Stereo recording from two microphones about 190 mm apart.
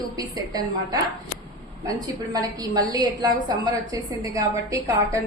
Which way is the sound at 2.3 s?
20° right (ahead or behind).